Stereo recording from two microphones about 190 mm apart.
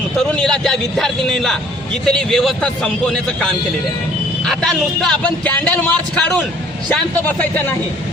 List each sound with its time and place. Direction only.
0.2 s a man's voice: 5° left (ahead or behind)